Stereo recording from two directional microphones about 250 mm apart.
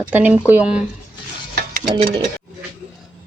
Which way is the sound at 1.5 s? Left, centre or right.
Right.